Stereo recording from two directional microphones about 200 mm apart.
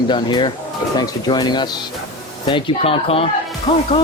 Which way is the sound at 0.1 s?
25° left (ahead or behind).